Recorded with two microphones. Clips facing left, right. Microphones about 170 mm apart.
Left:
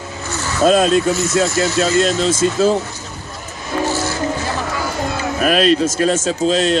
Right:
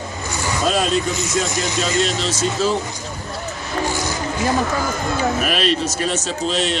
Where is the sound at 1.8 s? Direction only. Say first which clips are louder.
Left 5 dB; 45° left (ahead or behind).